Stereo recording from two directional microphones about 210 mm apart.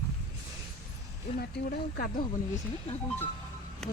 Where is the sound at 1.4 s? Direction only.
45° left (ahead or behind).